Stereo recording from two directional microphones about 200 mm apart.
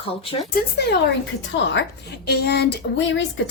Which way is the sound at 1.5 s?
65° left (ahead or behind).